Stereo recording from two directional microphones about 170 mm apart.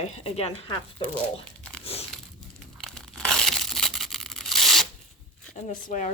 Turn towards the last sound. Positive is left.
turn(degrees=45)  # may be behind; listen again after turning